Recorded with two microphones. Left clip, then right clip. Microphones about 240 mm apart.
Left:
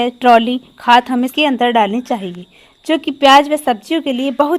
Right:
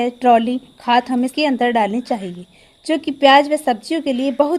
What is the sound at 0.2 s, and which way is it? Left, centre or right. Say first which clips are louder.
A woman's voice: left 4 dB; left.